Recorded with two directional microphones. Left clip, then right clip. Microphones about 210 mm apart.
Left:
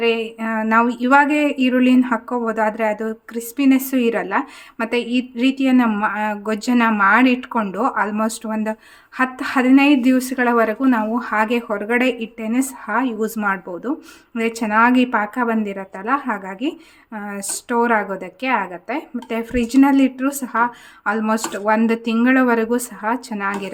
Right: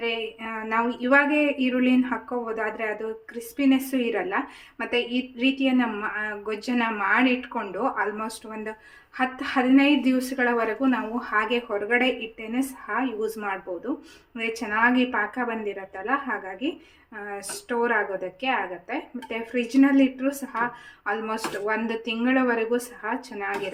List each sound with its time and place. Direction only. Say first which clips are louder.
0.0 s speech: left 9 dB; 55° left (ahead or behind)